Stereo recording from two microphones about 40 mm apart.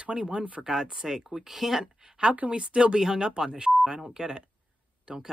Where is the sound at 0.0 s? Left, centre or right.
Right; by 1.9 s centre.